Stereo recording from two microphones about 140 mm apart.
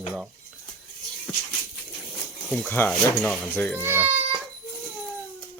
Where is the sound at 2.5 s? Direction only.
10° left (ahead or behind).